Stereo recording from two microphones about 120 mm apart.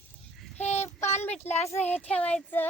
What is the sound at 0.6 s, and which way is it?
Child singing, 65° left (ahead or behind).